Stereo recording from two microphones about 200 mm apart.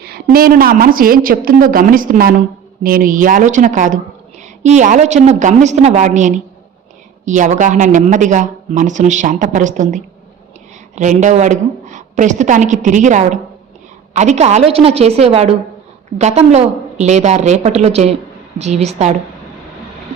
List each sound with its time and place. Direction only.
0.0 s a woman's voice: 50° right (ahead or behind); by 19.1 s 35° right (ahead or behind)